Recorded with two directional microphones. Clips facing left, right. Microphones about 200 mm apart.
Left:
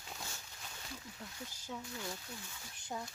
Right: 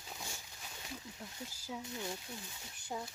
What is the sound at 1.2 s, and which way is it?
Speech, 5° right (ahead or behind).